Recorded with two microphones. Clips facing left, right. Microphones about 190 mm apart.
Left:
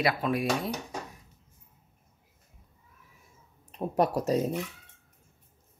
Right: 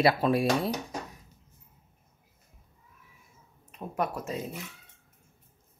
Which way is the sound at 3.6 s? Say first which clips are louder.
Left 5 dB; 35° left (ahead or behind).